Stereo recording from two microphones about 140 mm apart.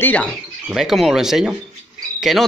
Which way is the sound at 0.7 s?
Centre (ahead or behind).